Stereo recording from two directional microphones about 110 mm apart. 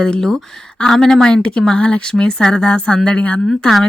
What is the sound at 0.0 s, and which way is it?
Speech, 5° left (ahead or behind).